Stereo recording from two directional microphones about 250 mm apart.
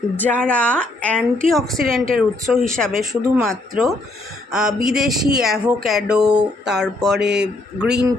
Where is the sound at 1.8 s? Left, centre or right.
Right.